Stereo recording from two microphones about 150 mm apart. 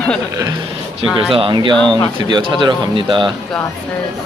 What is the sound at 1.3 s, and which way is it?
Speech, 35° right (ahead or behind).